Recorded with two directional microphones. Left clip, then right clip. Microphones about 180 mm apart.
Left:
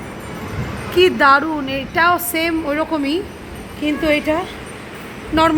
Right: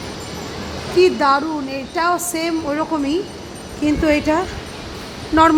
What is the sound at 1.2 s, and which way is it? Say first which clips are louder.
A woman's voice: left 4 dB; 10° left (ahead or behind).